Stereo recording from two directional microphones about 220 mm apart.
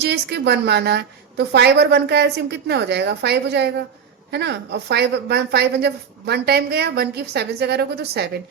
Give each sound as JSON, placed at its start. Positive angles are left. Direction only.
{"t": 0.0, "sound": "speech", "side_deg": -50}